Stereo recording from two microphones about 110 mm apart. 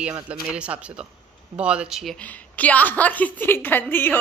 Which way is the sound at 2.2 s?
15° left (ahead or behind).